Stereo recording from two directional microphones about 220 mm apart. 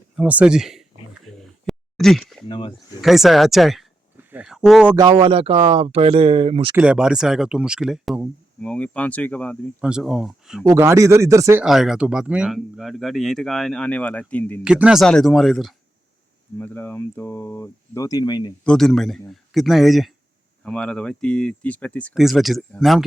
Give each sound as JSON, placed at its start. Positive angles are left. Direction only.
{"t": 0.2, "sound": "speech", "side_deg": -5}
{"t": 1.4, "sound": "a sound", "side_deg": 0}
{"t": 2.5, "sound": "speech", "side_deg": 20}
{"t": 3.0, "sound": "speech", "side_deg": 0}
{"t": 4.9, "sound": "speech", "side_deg": -20}
{"t": 6.7, "sound": "speech", "side_deg": -5}
{"t": 10.7, "sound": "speech", "side_deg": -10}
{"t": 11.6, "sound": "speech", "side_deg": 0}
{"t": 14.6, "sound": "speech", "side_deg": -5}
{"t": 18.6, "sound": "speech", "side_deg": 5}